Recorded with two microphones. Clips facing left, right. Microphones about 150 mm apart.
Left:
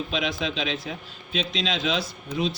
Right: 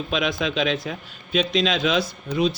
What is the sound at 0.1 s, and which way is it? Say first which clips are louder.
A man's voice: right 8 dB; 60° right (ahead or behind).